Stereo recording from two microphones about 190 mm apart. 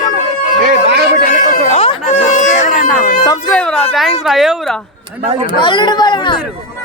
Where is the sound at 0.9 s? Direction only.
55° right (ahead or behind).